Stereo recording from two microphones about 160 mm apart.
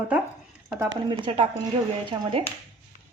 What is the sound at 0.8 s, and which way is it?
Speech, 30° right (ahead or behind).